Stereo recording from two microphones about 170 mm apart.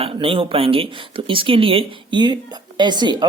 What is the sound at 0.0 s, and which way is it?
Speech, 35° right (ahead or behind).